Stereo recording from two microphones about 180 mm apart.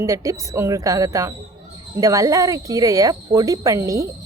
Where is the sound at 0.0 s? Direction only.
15° right (ahead or behind).